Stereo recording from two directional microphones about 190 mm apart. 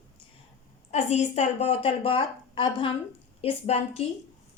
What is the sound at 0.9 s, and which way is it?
Speech, 35° left (ahead or behind).